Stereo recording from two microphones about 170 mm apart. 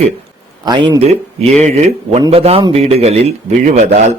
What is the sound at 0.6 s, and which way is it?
Speech, 25° right (ahead or behind).